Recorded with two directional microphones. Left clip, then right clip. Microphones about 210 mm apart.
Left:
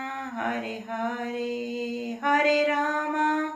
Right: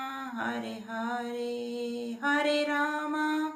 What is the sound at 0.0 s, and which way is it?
Mantra, 35° right (ahead or behind).